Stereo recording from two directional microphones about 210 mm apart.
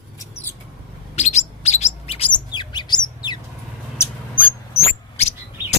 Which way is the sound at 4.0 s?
10° left (ahead or behind).